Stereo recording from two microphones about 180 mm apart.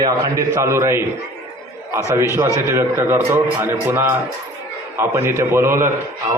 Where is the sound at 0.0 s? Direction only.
15° right (ahead or behind).